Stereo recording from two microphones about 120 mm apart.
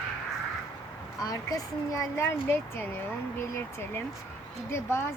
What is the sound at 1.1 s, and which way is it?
Speech, 30° left (ahead or behind).